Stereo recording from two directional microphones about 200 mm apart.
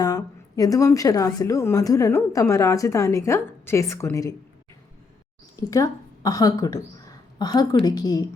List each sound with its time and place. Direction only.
0.0 s a woman's voice: 20° left (ahead or behind)
5.5 s speech: 15° left (ahead or behind)